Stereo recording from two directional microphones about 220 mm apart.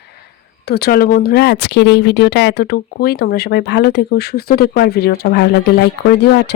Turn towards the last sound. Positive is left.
turn(degrees=50)  # may be behind; listen again after turning